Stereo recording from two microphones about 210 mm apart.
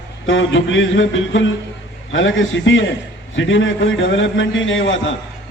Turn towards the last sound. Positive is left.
turn(degrees=60)  # may be behind; listen again after turning